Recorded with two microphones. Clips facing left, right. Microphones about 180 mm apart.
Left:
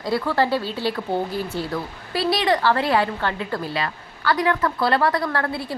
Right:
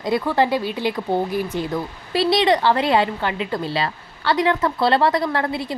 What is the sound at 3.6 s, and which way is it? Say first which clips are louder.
A woman's voice: right 3 dB; 30° right (ahead or behind).